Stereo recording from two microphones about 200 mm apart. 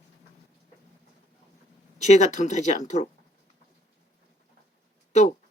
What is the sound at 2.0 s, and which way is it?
Speech, 35° left (ahead or behind).